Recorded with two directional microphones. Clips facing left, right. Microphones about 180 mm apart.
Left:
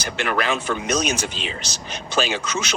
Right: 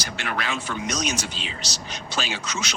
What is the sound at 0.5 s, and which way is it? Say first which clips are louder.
Speech: left 6 dB; 60° left (ahead or behind).